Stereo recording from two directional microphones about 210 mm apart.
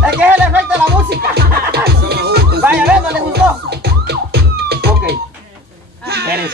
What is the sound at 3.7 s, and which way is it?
Music, 50° right (ahead or behind).